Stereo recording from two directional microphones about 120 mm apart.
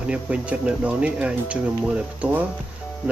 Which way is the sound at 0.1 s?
10° right (ahead or behind).